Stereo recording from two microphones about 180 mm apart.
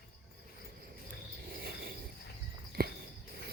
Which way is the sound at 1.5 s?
55° right (ahead or behind).